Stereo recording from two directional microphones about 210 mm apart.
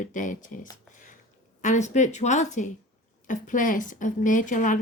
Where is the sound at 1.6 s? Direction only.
35° left (ahead or behind).